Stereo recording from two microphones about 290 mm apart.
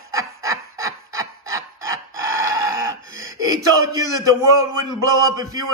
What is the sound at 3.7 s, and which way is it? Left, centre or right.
Speech, centre.